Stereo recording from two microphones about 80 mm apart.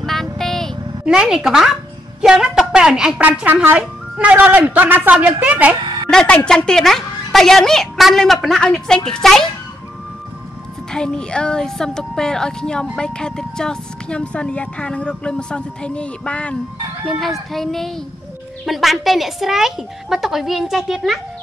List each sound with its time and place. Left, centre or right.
0.0 s vehicle: centre
1.0 s a woman's voice: centre
3.2 s a man's voice: centre
6.0 s a woman's voice: centre
10.9 s speech: centre
17.0 s a woman's voice: centre